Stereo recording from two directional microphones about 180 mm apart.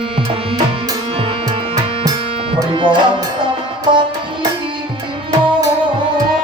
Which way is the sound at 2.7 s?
25° right (ahead or behind).